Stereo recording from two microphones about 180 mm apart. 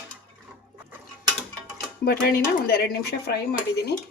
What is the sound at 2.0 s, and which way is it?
Speech, 60° left (ahead or behind).